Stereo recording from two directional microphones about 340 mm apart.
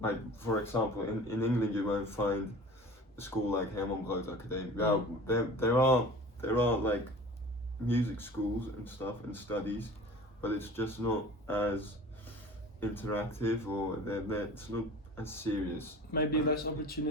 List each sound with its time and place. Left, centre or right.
0.0 s speech: centre
16.5 s a man's voice: left